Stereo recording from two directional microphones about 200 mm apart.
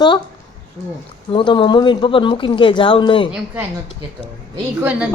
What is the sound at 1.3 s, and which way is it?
Speech, 25° left (ahead or behind).